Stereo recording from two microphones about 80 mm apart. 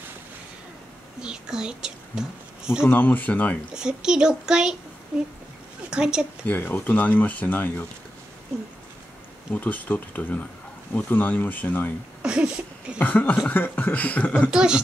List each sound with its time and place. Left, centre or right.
1.2 s whispering: centre
2.8 s speech: left
3.7 s a child's voice: centre
5.9 s speech: centre
6.4 s speech: left
9.5 s speech: left
12.2 s speech: centre
13.0 s speech: left
14.5 s a child's voice: centre